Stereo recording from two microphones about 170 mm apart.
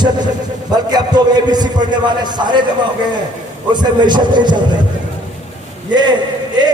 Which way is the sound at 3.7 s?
25° right (ahead or behind).